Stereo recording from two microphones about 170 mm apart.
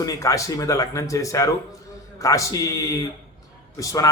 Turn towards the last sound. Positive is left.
turn(degrees=20)  # may be behind; listen again after turning